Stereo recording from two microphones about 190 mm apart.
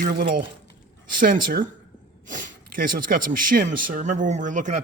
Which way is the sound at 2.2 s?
45° right (ahead or behind).